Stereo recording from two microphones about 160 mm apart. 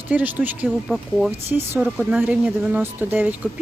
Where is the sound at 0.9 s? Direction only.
Centre (ahead or behind).